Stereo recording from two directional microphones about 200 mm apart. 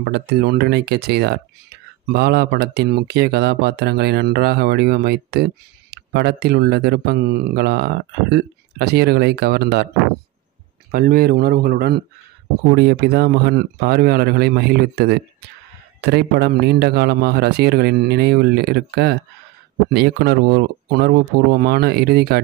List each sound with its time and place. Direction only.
0.0 s speech: 55° right (ahead or behind)
10.9 s speech: 50° right (ahead or behind)